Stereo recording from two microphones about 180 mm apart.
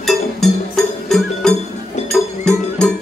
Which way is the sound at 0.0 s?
Centre (ahead or behind).